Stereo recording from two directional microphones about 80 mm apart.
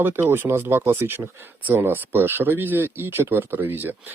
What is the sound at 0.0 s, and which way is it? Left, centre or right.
Speech, right.